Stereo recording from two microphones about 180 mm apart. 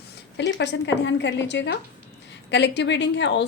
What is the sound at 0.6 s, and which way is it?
A woman's voice, 75° left (ahead or behind).